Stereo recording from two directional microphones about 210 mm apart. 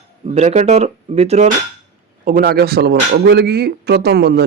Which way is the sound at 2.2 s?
45° right (ahead or behind).